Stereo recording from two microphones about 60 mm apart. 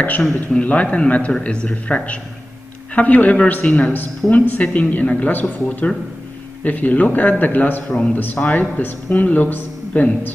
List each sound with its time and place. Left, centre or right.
0.2 s a man's voice: centre
0.7 s speech: left